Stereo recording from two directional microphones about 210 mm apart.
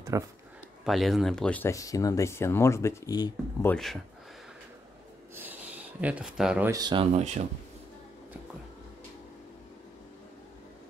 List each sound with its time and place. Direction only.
0.1 s speech: 15° right (ahead or behind)
0.8 s speech: centre (ahead or behind); by 3.7 s 20° left (ahead or behind)
3.7 s speech: centre (ahead or behind)
5.3 s a sound: 10° right (ahead or behind)
6.7 s speech: 20° right (ahead or behind)